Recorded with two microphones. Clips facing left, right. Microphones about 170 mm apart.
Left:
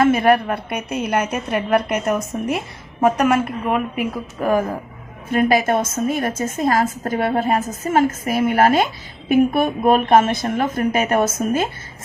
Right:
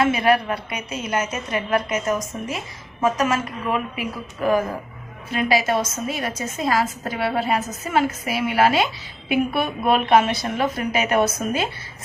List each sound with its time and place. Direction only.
0.0 s a woman's voice: 50° left (ahead or behind)
5.3 s a woman's voice: 50° left (ahead or behind)